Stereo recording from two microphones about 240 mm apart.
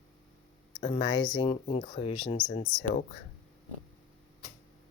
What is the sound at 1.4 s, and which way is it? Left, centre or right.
Speech, left.